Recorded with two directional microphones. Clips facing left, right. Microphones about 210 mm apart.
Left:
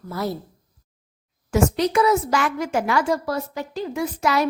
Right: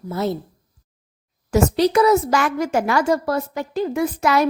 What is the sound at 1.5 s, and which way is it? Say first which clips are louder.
A woman's voice: right 3 dB; 35° right (ahead or behind).